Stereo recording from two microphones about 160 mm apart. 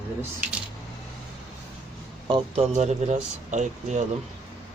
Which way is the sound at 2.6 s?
45° right (ahead or behind).